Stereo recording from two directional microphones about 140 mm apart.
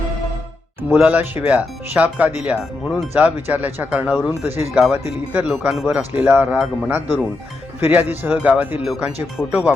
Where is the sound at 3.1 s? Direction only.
15° right (ahead or behind).